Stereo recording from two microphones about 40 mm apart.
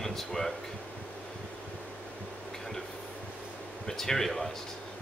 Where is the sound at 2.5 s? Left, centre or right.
Centre.